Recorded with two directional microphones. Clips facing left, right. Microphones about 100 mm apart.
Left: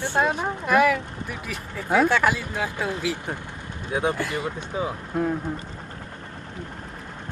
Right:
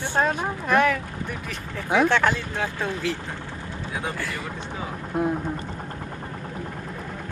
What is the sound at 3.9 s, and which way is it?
Speech, 20° left (ahead or behind).